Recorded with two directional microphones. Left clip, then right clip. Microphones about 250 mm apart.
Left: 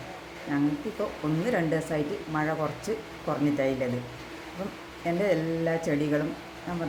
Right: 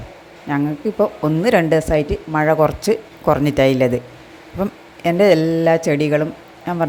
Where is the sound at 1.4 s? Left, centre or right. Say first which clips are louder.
Right 14 dB; right.